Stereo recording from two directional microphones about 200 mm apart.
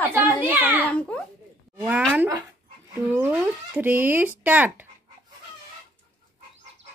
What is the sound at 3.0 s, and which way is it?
Speech, 10° right (ahead or behind).